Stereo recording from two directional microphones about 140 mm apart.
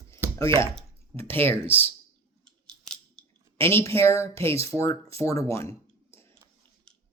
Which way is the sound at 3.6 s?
20° left (ahead or behind).